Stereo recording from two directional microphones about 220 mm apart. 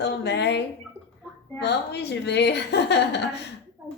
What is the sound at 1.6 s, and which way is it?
A woman's voice, 50° left (ahead or behind).